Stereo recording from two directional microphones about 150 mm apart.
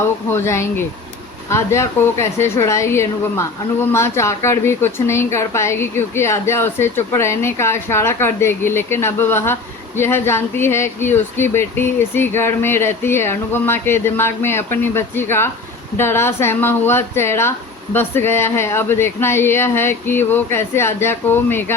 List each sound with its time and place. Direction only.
0.3 s speech: 20° left (ahead or behind)